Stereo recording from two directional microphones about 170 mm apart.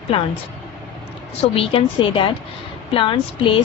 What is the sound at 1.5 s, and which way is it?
A woman's voice, 30° left (ahead or behind).